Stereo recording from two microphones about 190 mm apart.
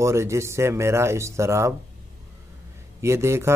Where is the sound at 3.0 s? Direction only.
15° right (ahead or behind).